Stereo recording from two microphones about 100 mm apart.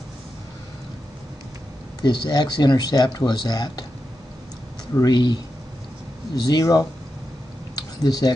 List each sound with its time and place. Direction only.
2.0 s speech: 45° left (ahead or behind)
4.9 s speech: 45° left (ahead or behind)
6.4 s speech: 40° left (ahead or behind)
7.7 s a sound: 40° left (ahead or behind)